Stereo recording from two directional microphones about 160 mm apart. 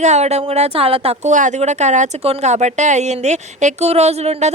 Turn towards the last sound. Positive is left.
turn(degrees=-45)  # may be behind; listen again after turning